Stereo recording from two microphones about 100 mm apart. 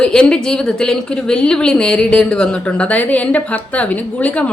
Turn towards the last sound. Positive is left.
turn(degrees=15)  # may be behind; listen again after turning